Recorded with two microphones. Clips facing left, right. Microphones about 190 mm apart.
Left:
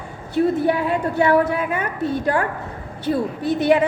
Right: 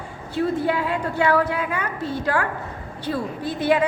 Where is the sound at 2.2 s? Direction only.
20° left (ahead or behind).